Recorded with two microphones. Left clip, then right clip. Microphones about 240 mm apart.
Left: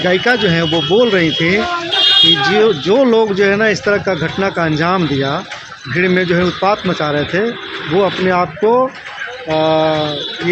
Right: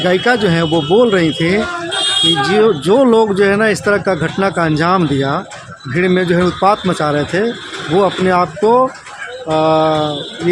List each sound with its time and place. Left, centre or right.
0.0 s speech: centre
1.5 s buzzer: right
2.5 s speech: centre